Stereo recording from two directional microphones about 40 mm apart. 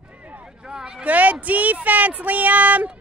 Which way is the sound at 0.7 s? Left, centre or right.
Centre.